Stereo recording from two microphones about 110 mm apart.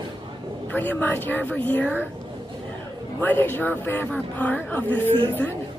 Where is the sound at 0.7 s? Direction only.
15° left (ahead or behind).